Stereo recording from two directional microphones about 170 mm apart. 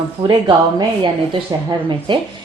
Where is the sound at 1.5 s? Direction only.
20° right (ahead or behind).